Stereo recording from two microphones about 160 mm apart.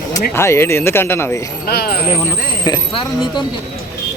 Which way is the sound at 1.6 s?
75° left (ahead or behind).